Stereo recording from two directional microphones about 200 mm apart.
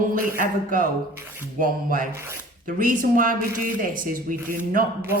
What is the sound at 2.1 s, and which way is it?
Speech, 15° right (ahead or behind).